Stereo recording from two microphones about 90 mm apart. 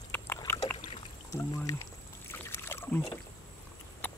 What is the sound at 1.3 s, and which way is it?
Speech, 30° left (ahead or behind).